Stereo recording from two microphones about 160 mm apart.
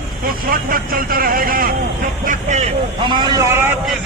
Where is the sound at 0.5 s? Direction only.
65° right (ahead or behind).